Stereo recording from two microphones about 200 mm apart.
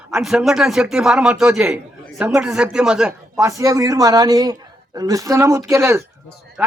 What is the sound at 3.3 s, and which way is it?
A man's voice, 15° right (ahead or behind).